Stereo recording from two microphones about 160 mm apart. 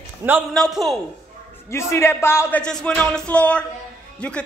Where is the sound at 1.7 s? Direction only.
15° left (ahead or behind).